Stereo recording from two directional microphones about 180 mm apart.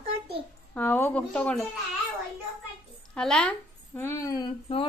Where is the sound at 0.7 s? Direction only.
10° left (ahead or behind).